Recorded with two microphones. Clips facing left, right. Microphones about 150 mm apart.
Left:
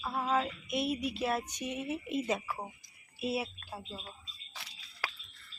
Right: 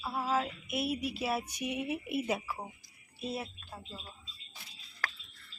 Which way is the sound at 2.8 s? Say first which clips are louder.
Left 4 dB; 10° left (ahead or behind).